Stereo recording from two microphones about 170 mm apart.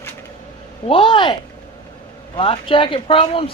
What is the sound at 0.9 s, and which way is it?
Speech, 30° left (ahead or behind).